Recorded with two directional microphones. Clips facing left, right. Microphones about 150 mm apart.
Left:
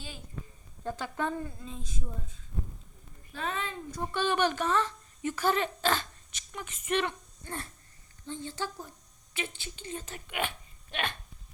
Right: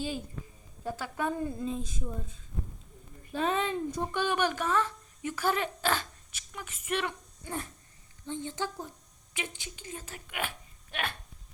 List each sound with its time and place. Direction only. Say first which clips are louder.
0.9 s speech: even; 10° right (ahead or behind)
3.3 s speech: right 6 dB; 20° right (ahead or behind); by 10.5 s 5° right (ahead or behind)